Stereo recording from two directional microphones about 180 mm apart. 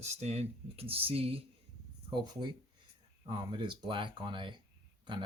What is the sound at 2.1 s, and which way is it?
Speech, 25° right (ahead or behind).